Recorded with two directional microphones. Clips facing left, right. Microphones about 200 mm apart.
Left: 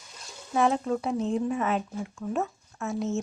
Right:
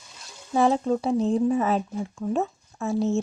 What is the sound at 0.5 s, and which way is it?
A woman's voice, 30° right (ahead or behind).